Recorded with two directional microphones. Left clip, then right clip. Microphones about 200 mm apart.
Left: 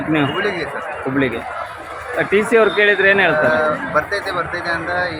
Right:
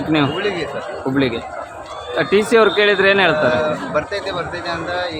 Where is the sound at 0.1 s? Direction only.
10° right (ahead or behind).